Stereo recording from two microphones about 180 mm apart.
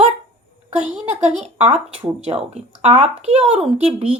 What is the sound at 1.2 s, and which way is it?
Speech, 40° right (ahead or behind).